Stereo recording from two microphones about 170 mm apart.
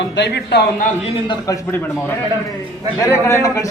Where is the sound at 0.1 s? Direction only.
85° left.